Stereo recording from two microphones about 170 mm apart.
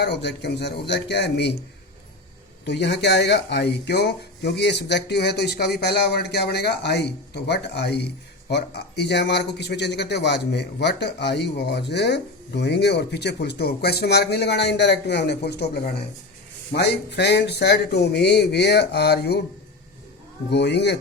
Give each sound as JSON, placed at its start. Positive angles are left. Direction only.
{"t": 0.0, "sound": "speech", "side_deg": 80}
{"t": 2.6, "sound": "speech", "side_deg": 85}
{"t": 20.5, "sound": "speech", "side_deg": 80}